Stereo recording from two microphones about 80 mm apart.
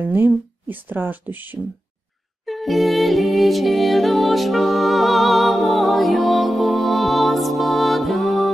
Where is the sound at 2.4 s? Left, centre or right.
Centre.